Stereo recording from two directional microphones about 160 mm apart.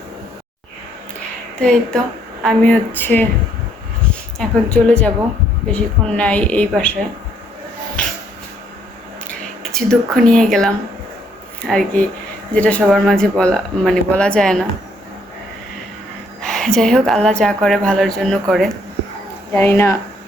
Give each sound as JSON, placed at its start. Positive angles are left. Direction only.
{"t": 1.6, "sound": "a woman's voice", "side_deg": 5}
{"t": 9.7, "sound": "a woman's voice", "side_deg": 5}
{"t": 16.4, "sound": "a woman's voice", "side_deg": 5}
{"t": 19.5, "sound": "a woman's voice", "side_deg": 15}